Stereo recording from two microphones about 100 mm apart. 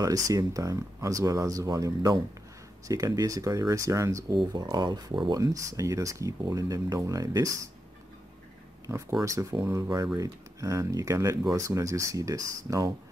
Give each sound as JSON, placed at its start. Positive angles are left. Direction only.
{"t": 0.0, "sound": "speech", "side_deg": -35}
{"t": 4.3, "sound": "speech", "side_deg": -45}
{"t": 5.4, "sound": "speech", "side_deg": -35}
{"t": 8.9, "sound": "speech", "side_deg": -30}